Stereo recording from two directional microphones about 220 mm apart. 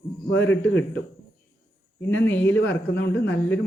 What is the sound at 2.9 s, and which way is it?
Speech, 50° left (ahead or behind).